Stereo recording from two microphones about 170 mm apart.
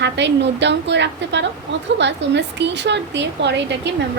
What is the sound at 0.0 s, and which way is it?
A woman's voice, 90° right.